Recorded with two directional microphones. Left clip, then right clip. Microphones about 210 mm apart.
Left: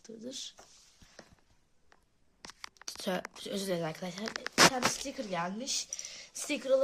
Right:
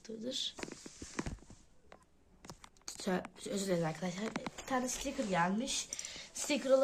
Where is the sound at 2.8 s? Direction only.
40° left (ahead or behind).